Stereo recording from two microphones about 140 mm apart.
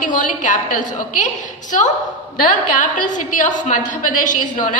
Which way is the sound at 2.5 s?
65° left (ahead or behind).